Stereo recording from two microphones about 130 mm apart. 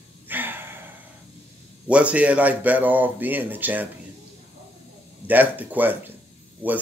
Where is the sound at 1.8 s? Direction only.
10° right (ahead or behind).